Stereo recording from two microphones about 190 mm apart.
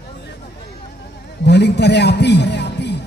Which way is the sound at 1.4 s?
60° left (ahead or behind).